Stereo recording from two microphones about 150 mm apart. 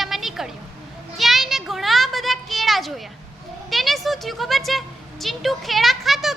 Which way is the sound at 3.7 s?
Centre (ahead or behind).